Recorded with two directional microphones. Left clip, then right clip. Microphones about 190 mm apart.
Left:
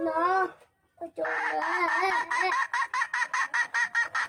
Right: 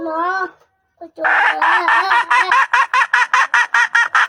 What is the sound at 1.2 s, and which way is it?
Bird, 45° right (ahead or behind).